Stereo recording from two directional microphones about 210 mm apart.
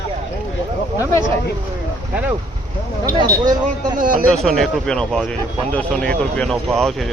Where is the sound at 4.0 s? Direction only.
40° right (ahead or behind).